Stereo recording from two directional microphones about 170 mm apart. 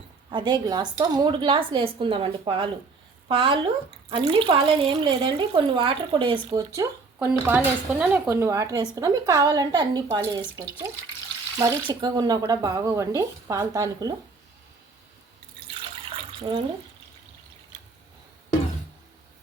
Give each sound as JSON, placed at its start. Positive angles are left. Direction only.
{"t": 0.3, "sound": "speech", "side_deg": -25}
{"t": 7.2, "sound": "speech", "side_deg": -10}
{"t": 11.5, "sound": "speech", "side_deg": -20}